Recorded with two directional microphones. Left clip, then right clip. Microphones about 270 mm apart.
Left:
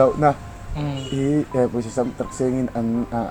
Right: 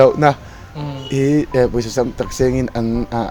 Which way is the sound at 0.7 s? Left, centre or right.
Centre.